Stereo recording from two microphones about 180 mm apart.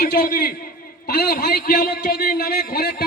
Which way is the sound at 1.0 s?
65° left (ahead or behind).